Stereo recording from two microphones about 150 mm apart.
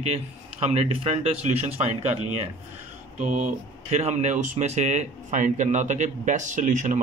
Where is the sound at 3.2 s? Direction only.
55° right (ahead or behind).